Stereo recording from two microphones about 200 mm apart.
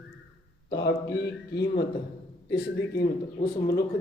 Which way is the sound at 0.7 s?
55° left (ahead or behind).